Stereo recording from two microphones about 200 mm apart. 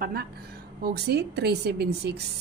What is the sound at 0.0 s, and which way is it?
A woman's voice, 50° right (ahead or behind).